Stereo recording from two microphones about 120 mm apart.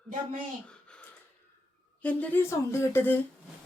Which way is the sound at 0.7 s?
10° left (ahead or behind).